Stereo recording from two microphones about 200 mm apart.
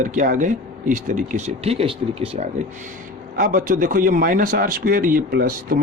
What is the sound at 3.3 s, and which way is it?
Speech, 45° right (ahead or behind).